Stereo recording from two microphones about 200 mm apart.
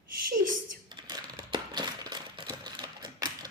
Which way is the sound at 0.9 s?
20° right (ahead or behind).